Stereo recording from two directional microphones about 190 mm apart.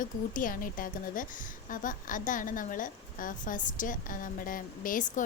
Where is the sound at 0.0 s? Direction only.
45° left (ahead or behind).